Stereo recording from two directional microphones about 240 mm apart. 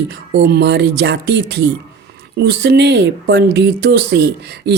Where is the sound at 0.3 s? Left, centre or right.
Right.